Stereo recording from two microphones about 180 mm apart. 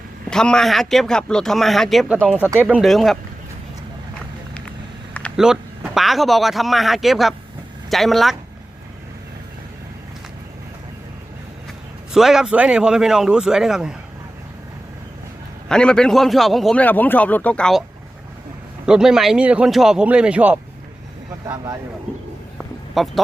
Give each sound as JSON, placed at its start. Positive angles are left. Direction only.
{"t": 0.3, "sound": "speech", "side_deg": 5}
{"t": 2.5, "sound": "speech", "side_deg": -10}
{"t": 5.4, "sound": "speech", "side_deg": -5}
{"t": 12.1, "sound": "speech", "side_deg": 0}
{"t": 15.7, "sound": "speech", "side_deg": 5}
{"t": 18.9, "sound": "speech", "side_deg": -5}
{"t": 22.5, "sound": "a sound", "side_deg": 0}